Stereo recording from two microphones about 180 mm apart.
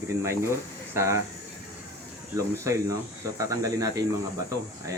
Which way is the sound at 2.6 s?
20° right (ahead or behind).